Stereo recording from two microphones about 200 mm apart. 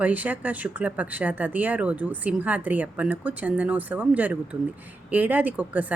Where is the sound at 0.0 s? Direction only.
10° right (ahead or behind).